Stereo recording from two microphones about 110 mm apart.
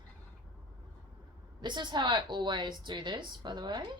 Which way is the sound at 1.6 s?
45° right (ahead or behind).